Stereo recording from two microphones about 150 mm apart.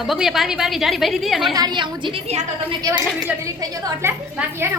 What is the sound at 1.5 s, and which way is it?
Speech, 30° right (ahead or behind).